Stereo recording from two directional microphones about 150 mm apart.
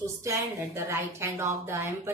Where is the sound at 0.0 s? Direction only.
20° right (ahead or behind).